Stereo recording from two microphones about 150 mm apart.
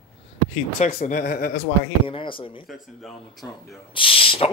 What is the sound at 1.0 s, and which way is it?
Speech, 75° left (ahead or behind).